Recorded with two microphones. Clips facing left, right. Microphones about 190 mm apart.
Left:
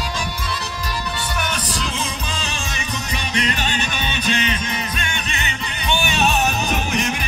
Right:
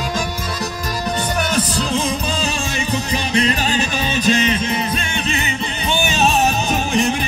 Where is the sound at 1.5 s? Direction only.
40° right (ahead or behind).